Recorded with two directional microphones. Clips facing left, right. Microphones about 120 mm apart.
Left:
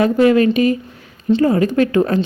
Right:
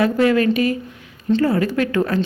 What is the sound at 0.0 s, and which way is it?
A woman's voice, 20° left (ahead or behind).